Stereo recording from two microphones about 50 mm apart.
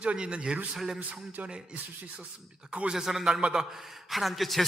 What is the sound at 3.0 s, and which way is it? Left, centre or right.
A man's voice, centre.